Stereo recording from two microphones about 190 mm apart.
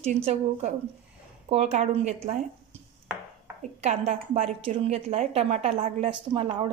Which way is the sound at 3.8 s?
35° right (ahead or behind).